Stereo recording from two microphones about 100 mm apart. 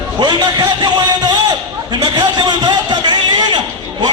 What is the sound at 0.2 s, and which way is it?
Speech, 45° right (ahead or behind).